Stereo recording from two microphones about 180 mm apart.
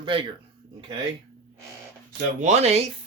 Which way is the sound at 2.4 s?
40° right (ahead or behind).